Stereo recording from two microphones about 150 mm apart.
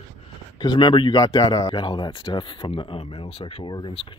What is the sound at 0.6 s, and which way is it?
Speech, 30° left (ahead or behind).